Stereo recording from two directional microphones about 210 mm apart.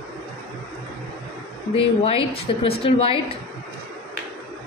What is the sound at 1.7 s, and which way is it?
A woman's voice, 25° left (ahead or behind).